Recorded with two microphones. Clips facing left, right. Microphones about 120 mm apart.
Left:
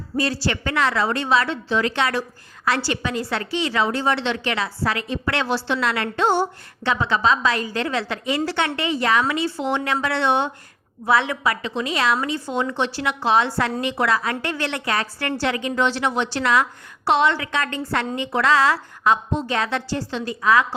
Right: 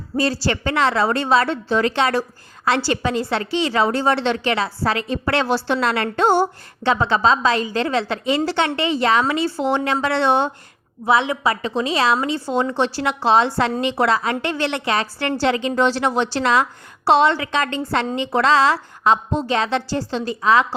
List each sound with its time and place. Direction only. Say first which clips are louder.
0.2 s a woman's voice: right 3 dB; 30° right (ahead or behind)
6.8 s a woman's voice: right 3 dB; 30° right (ahead or behind)
11.0 s a woman's voice: right 2 dB; 20° right (ahead or behind)